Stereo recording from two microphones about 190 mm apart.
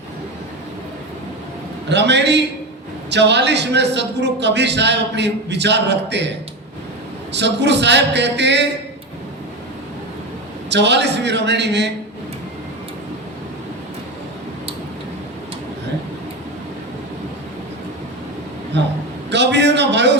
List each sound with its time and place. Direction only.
1.9 s a man's voice: 65° right (ahead or behind)
7.3 s a man's voice: 65° right (ahead or behind)
10.7 s a man's voice: 65° right (ahead or behind)
19.3 s a sound: 65° right (ahead or behind)